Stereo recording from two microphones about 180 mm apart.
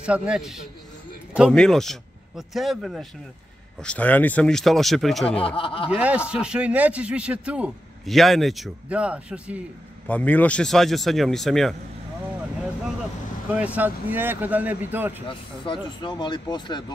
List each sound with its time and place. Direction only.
0.0 s speech: 5° right (ahead or behind)
5.6 s speech: 30° left (ahead or behind)
5.9 s a man's voice: 5° right (ahead or behind)
10.0 s speech: 10° left (ahead or behind)
13.5 s a man's voice: 10° right (ahead or behind)
15.2 s speech: 30° left (ahead or behind)